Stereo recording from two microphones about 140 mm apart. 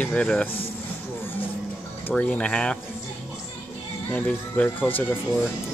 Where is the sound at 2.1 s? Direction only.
10° left (ahead or behind).